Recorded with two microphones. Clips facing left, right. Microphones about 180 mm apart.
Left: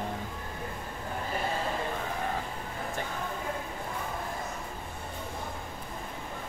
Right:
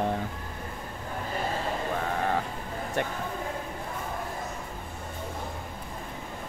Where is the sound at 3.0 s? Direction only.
70° right (ahead or behind).